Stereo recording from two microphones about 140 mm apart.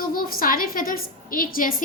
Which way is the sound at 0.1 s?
90° left.